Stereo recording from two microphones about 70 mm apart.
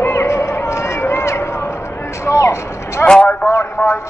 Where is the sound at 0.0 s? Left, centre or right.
Left.